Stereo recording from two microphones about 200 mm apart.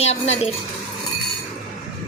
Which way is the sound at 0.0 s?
30° left (ahead or behind).